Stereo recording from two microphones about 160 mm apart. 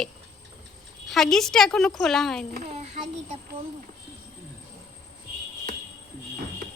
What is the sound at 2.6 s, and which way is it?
Child singing, 45° right (ahead or behind).